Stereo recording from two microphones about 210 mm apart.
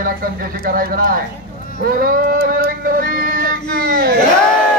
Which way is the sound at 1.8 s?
45° right (ahead or behind).